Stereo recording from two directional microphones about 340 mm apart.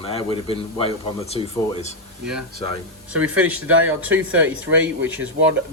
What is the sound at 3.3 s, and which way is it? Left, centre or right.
Speech, right.